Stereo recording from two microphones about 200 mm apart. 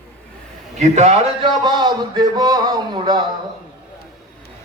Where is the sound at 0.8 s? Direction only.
35° right (ahead or behind).